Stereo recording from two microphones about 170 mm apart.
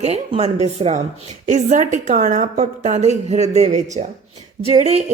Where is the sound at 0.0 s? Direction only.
35° right (ahead or behind).